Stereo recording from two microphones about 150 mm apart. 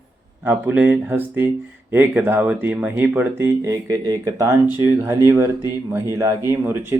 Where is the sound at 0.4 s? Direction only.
10° right (ahead or behind).